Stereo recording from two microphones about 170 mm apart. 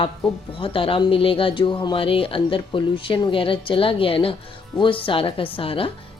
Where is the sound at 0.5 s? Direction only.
30° left (ahead or behind).